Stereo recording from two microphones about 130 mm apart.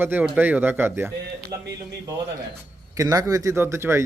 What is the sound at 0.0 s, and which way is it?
Speech, 15° right (ahead or behind).